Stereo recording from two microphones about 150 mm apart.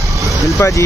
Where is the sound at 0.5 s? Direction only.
20° left (ahead or behind).